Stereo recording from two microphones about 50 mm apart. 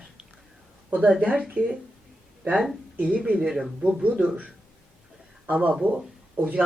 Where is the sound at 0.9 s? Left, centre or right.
Right.